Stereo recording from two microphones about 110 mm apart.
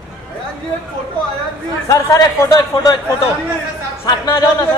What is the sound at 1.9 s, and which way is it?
A man's voice, 30° left (ahead or behind).